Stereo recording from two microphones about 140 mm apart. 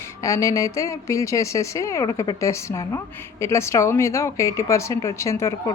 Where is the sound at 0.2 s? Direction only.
25° left (ahead or behind).